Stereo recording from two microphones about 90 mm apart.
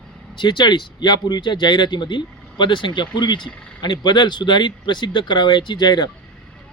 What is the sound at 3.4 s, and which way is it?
Speech, 10° left (ahead or behind).